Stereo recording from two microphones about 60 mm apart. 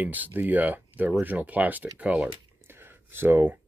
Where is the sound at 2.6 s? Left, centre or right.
Right.